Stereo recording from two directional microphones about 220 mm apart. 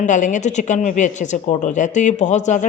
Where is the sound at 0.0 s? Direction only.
35° left (ahead or behind).